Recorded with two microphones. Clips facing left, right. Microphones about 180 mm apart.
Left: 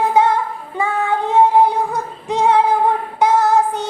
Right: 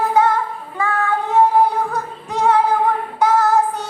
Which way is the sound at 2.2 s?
25° left (ahead or behind).